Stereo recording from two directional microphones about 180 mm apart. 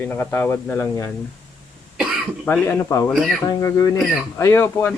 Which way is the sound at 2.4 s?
10° left (ahead or behind).